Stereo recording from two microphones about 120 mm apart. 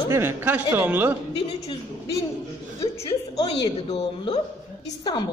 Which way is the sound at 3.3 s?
60° left (ahead or behind).